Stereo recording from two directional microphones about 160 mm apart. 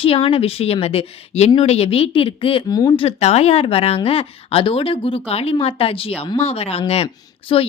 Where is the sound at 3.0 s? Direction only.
40° left (ahead or behind).